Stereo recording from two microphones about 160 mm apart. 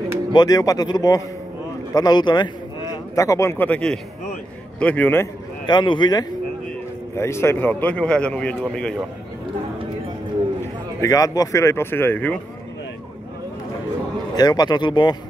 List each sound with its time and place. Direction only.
0.3 s a man's voice: 25° left (ahead or behind)
5.7 s a man's voice: 30° left (ahead or behind)
7.2 s a man's voice: 15° left (ahead or behind)
11.0 s a man's voice: 20° left (ahead or behind)
14.3 s a man's voice: 25° left (ahead or behind)